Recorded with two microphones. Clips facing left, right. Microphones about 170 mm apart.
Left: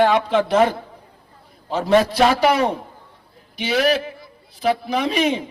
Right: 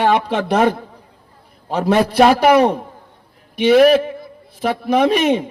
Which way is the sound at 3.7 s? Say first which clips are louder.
Right 9 dB; 50° right (ahead or behind).